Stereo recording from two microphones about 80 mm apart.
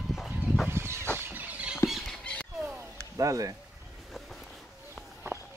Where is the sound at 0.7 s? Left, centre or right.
Right.